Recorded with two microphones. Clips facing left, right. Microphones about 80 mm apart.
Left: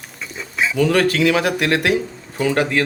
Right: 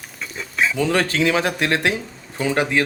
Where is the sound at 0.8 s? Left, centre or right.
Right.